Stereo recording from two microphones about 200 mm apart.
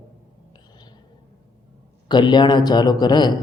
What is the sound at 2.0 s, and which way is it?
A man's voice, 20° left (ahead or behind).